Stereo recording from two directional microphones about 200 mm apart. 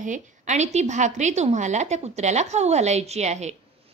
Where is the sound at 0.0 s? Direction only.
35° right (ahead or behind).